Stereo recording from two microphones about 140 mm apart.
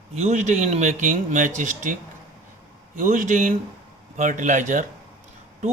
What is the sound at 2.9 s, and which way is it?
A man's voice, 65° right (ahead or behind).